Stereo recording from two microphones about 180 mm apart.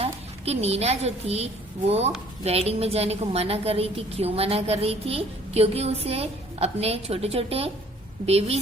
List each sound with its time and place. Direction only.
0.0 s a woman's voice: 35° right (ahead or behind)